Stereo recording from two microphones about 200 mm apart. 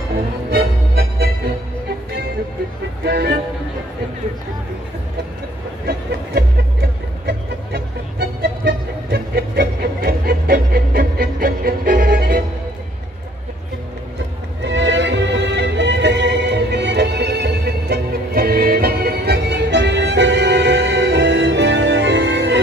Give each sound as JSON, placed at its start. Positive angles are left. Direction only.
{"t": 0.5, "sound": "music", "side_deg": -50}
{"t": 3.0, "sound": "speech", "side_deg": -55}
{"t": 5.9, "sound": "music", "side_deg": -50}
{"t": 14.6, "sound": "music", "side_deg": -60}